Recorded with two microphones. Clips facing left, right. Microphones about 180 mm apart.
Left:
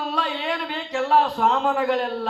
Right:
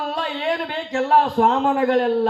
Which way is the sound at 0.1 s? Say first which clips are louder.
Right 3 dB; 45° right (ahead or behind).